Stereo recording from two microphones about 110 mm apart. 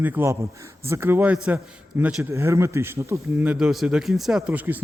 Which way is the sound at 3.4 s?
5° right (ahead or behind).